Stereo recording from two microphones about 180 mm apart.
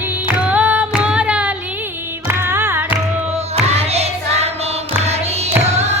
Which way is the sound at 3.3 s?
35° right (ahead or behind).